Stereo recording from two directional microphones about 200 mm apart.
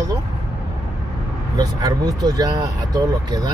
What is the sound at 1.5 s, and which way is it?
Speech, 20° right (ahead or behind).